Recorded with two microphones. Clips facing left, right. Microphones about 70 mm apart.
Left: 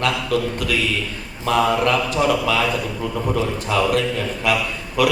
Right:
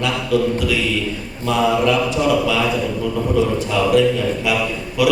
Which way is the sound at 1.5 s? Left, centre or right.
Left.